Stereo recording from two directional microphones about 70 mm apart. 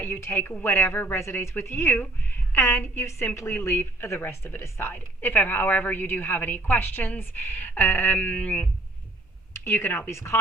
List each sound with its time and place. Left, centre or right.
0.0 s a woman's voice: left
9.5 s a woman's voice: left